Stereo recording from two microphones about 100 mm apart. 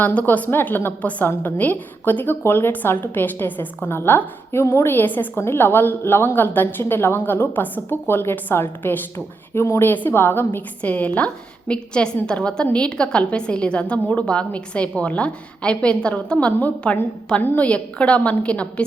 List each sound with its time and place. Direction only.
0.0 s a woman's voice: 15° left (ahead or behind)